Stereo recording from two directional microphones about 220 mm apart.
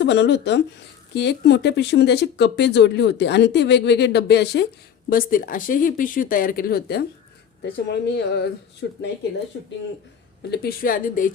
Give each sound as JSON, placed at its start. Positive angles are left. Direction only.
{"t": 0.0, "sound": "speech", "side_deg": 50}
{"t": 8.1, "sound": "speech", "side_deg": 50}
{"t": 10.5, "sound": "speech", "side_deg": 45}